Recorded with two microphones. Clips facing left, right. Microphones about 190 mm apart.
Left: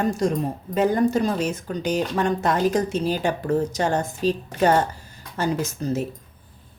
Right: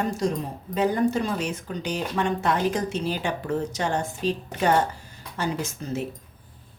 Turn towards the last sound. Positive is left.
turn(degrees=40)  # may be behind; listen again after turning